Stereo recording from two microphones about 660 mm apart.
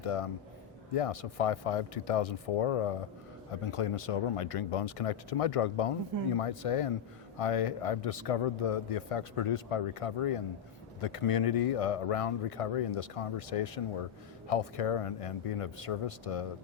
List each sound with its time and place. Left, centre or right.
0.0 s speech: left